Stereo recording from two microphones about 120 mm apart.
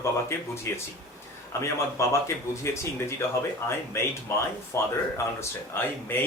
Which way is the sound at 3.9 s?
25° left (ahead or behind).